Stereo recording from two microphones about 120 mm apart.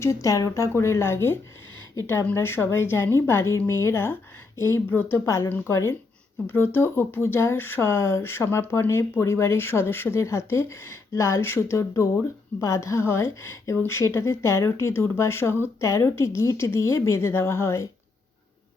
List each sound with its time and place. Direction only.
0.0 s speech: 25° left (ahead or behind)